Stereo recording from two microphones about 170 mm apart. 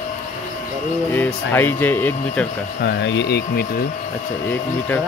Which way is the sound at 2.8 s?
85° left.